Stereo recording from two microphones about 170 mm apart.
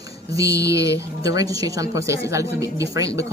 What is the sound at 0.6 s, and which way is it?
A woman's voice, 20° right (ahead or behind).